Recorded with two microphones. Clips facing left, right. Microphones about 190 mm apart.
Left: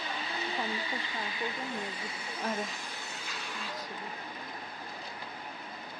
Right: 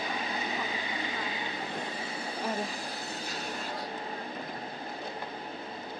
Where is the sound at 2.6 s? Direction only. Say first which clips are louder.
Right 4 dB; 40° right (ahead or behind).